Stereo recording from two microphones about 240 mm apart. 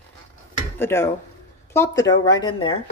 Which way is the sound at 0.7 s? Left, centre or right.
Centre.